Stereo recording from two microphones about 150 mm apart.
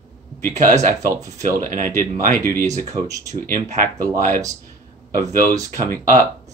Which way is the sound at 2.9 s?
20° right (ahead or behind).